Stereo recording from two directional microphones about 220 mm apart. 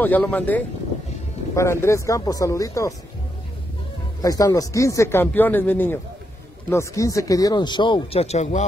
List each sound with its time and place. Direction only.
0.0 s speech: 10° left (ahead or behind)
4.2 s speech: 15° left (ahead or behind); by 8.6 s 30° left (ahead or behind)